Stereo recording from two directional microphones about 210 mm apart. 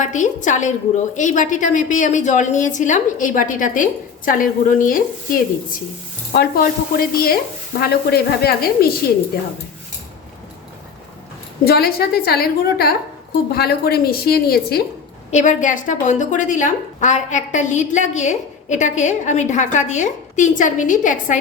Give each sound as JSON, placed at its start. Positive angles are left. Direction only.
{"t": 0.0, "sound": "a woman's voice", "side_deg": 35}
{"t": 11.6, "sound": "a woman's voice", "side_deg": 45}
{"t": 15.3, "sound": "a woman's voice", "side_deg": 35}